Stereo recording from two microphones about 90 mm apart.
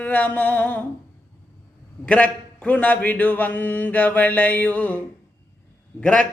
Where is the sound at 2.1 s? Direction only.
15° left (ahead or behind).